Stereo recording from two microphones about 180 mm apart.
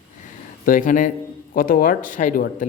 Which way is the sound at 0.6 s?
50° left (ahead or behind).